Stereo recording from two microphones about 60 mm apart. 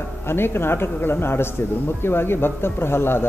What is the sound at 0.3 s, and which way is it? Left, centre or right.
A man's voice, left.